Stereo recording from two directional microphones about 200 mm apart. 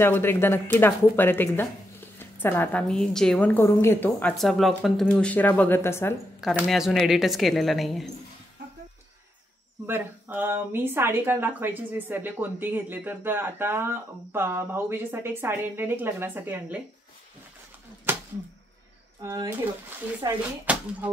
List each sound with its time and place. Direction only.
0.0 s speech: 10° left (ahead or behind)
6.4 s speech: centre (ahead or behind)
9.8 s speech: 10° right (ahead or behind)
19.2 s speech: 15° right (ahead or behind)
20.7 s a sound: 5° right (ahead or behind)